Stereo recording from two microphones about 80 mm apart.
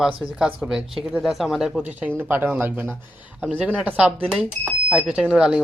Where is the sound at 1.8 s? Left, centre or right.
Centre.